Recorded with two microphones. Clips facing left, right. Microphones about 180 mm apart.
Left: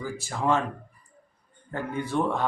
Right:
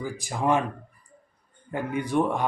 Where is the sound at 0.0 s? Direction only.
15° right (ahead or behind).